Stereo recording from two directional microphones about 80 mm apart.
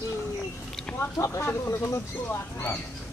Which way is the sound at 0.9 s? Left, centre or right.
Left.